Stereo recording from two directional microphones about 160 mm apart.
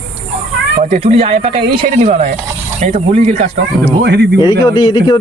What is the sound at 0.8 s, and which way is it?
Speech, 45° right (ahead or behind).